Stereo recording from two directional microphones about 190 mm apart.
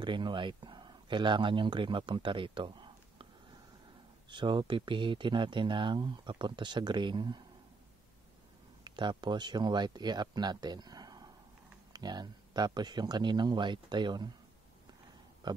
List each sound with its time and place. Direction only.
0.0 s speech: 25° right (ahead or behind)
4.3 s speech: 25° right (ahead or behind)
8.8 s speech: 25° right (ahead or behind)
15.4 s speech: 20° right (ahead or behind)